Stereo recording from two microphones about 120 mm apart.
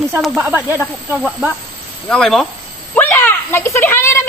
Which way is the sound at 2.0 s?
5° left (ahead or behind).